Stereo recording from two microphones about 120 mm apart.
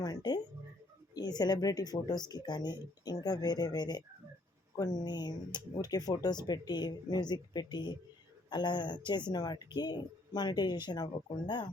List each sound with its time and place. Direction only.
0.0 s music: 35° left (ahead or behind)
1.1 s speech: 35° left (ahead or behind)